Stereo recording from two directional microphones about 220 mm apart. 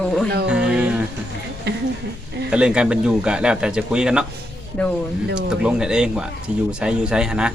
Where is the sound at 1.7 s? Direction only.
50° right (ahead or behind).